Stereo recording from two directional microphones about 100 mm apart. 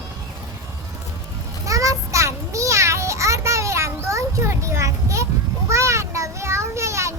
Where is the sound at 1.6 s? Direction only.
35° right (ahead or behind).